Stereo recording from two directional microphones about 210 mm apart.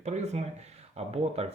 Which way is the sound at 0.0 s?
35° right (ahead or behind).